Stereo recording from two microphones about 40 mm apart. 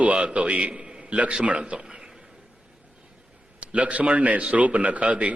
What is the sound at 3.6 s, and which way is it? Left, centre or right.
A man's voice, right.